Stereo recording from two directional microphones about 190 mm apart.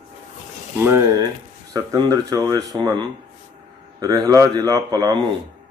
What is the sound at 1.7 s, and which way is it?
Speech, 20° right (ahead or behind).